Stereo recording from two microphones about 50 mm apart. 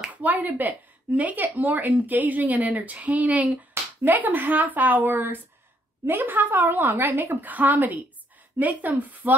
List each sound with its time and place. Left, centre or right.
0.1 s speech: right